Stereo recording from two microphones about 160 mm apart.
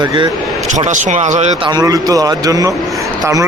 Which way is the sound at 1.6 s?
25° right (ahead or behind).